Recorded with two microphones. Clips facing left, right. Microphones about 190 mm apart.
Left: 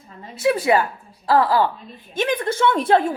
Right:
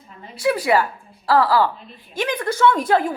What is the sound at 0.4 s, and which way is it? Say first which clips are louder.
A woman's voice: left 1 dB; 25° left (ahead or behind).